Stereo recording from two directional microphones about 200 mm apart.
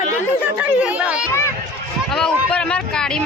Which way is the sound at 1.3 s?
15° left (ahead or behind).